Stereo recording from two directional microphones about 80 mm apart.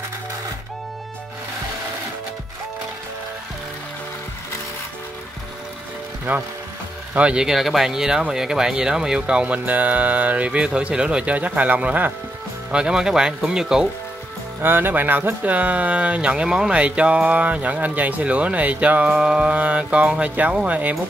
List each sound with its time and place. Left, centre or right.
6.3 s speech: right
7.2 s speech: centre
12.7 s speech: centre
14.6 s speech: right